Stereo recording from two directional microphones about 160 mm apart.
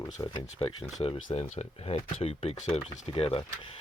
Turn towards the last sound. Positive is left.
turn(degrees=35)  # may be behind; listen again after turning